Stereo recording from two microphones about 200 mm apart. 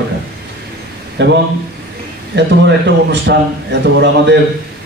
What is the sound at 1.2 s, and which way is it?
Speech, 65° right (ahead or behind).